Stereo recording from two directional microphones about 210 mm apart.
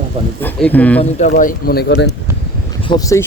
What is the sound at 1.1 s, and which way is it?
Speech, 35° left (ahead or behind).